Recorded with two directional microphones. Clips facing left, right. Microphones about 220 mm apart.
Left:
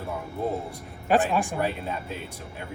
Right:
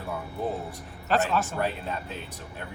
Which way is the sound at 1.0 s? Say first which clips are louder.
Left 3 dB; 15° left (ahead or behind).